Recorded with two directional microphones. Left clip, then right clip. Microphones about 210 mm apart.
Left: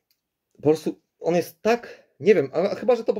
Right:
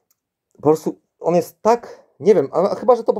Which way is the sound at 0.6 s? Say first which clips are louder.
Right 5 dB; 5° right (ahead or behind).